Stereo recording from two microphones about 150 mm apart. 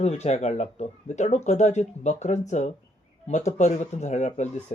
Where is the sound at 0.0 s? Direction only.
45° left (ahead or behind).